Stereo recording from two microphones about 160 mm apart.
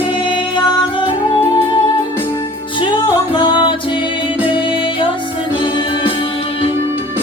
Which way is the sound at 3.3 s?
30° left (ahead or behind).